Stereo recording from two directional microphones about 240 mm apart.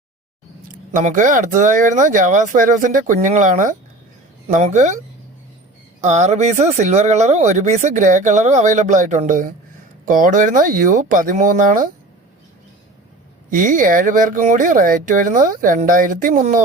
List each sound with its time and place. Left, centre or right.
0.9 s speech: right
6.0 s speech: right
13.5 s speech: right